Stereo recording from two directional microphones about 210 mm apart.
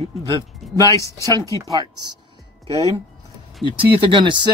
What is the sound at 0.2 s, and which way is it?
Speech, 15° right (ahead or behind).